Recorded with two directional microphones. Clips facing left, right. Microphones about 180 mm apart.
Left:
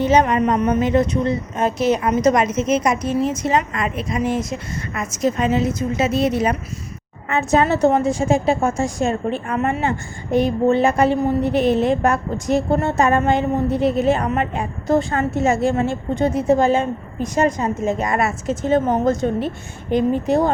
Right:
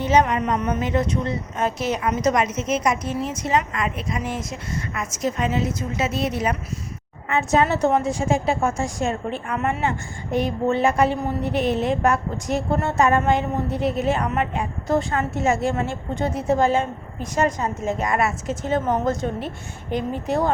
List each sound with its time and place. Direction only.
0.0 s a woman's voice: 30° left (ahead or behind)
2.0 s a woman's voice: 35° left (ahead or behind)
7.3 s a woman's voice: 40° left (ahead or behind); by 20.5 s 20° left (ahead or behind)